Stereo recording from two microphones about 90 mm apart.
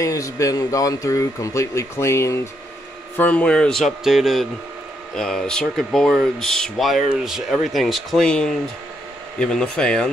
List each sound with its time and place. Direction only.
0.0 s speech: 40° left (ahead or behind)
3.2 s speech: 15° left (ahead or behind)